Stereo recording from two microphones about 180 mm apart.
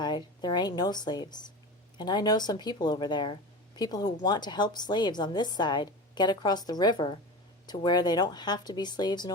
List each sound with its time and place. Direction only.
0.0 s a woman's voice: 25° left (ahead or behind)